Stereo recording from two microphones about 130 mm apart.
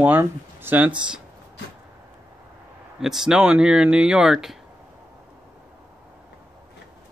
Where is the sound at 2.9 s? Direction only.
5° right (ahead or behind).